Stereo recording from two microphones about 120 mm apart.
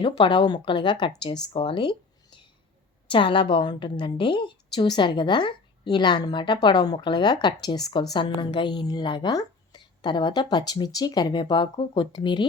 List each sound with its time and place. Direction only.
0.0 s a woman's voice: 45° left (ahead or behind)